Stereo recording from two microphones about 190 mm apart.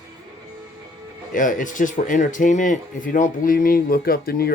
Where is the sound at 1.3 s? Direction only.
45° left (ahead or behind).